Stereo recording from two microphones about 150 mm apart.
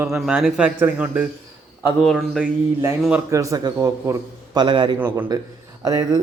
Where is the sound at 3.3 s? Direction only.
20° right (ahead or behind).